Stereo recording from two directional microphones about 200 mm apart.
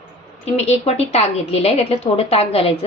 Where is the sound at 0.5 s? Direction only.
30° left (ahead or behind).